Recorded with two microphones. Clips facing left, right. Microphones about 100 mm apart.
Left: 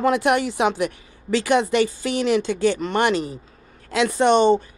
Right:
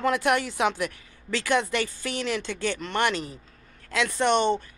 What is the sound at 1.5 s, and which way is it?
Speech, 20° left (ahead or behind).